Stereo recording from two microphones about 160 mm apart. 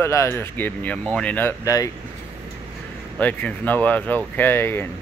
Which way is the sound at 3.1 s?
10° left (ahead or behind).